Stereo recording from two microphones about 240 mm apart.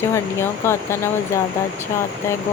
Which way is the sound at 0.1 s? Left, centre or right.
Centre.